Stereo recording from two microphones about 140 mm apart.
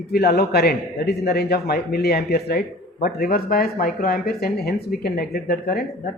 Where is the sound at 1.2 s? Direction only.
90° left.